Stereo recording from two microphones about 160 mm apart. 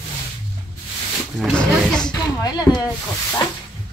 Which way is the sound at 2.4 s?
25° left (ahead or behind).